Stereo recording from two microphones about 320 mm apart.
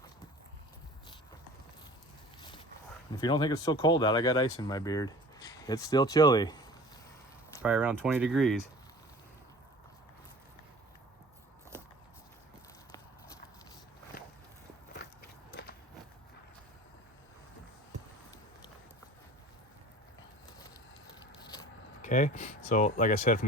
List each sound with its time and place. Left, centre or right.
3.1 s speech: centre
7.6 s speech: centre
21.4 s keys jangling: centre
22.7 s speech: left